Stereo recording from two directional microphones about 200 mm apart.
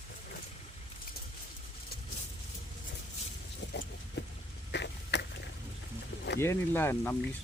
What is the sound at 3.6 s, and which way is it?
Vehicle, 60° left (ahead or behind).